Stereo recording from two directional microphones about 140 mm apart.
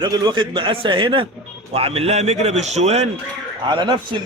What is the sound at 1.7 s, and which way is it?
A man's voice, 45° right (ahead or behind).